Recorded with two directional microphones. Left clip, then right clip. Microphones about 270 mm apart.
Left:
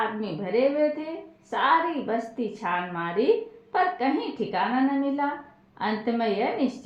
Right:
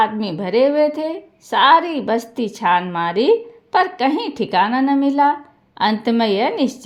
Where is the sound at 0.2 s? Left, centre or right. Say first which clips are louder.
Right 8 dB; right.